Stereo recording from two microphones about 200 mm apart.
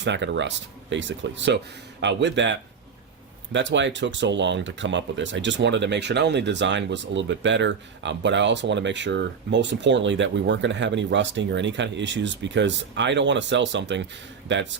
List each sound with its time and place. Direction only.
0.0 s speech: 60° right (ahead or behind)